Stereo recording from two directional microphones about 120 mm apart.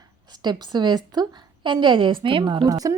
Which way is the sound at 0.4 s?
35° right (ahead or behind).